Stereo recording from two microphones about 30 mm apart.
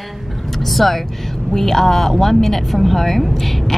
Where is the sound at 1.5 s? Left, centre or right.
Centre.